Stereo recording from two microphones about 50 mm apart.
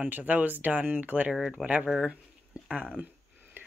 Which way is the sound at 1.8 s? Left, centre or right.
Centre.